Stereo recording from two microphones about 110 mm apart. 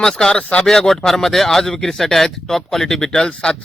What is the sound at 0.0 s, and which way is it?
Speech, 5° left (ahead or behind).